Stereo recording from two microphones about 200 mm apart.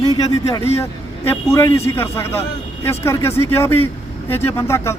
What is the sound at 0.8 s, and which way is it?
Speech, 15° left (ahead or behind).